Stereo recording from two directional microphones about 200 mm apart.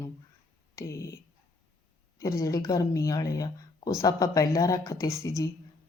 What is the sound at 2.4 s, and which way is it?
Speech, 15° left (ahead or behind).